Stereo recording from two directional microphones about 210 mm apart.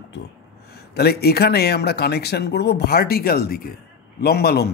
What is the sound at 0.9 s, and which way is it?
A man's voice, 50° left (ahead or behind).